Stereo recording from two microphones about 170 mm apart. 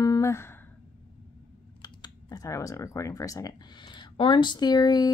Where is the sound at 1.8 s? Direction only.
20° left (ahead or behind).